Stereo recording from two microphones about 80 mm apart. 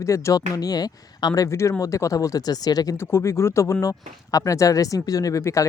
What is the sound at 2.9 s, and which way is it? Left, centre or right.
Speech, left.